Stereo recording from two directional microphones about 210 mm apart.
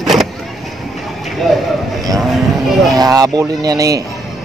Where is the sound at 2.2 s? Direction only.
Centre (ahead or behind).